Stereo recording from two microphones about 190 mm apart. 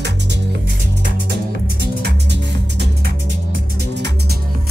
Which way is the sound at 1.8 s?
60° right (ahead or behind).